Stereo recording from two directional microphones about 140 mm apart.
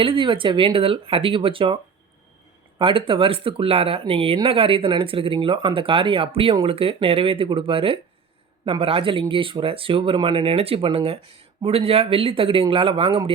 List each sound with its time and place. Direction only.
0.0 s speech: 35° right (ahead or behind)